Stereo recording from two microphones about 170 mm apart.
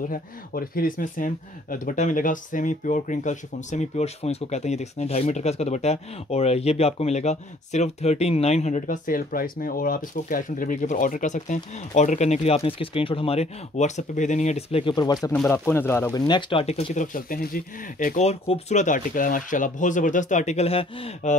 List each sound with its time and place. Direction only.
0.1 s speech: 60° left (ahead or behind); by 15.3 s 25° left (ahead or behind)
15.3 s speech: 10° left (ahead or behind); by 21.4 s 40° left (ahead or behind)